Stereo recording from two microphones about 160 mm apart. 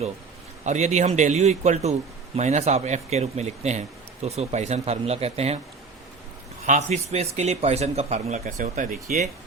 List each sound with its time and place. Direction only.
0.6 s a man's voice: 45° right (ahead or behind)
6.7 s a man's voice: 45° right (ahead or behind)